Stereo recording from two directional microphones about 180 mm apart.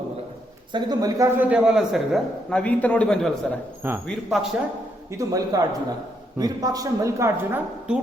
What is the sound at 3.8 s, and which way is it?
Speech, 10° right (ahead or behind).